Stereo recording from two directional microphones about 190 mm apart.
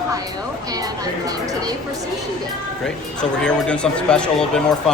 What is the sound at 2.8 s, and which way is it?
Speech, 5° left (ahead or behind).